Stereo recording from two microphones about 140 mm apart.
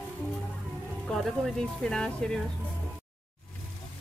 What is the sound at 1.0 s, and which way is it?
Speech, centre (ahead or behind).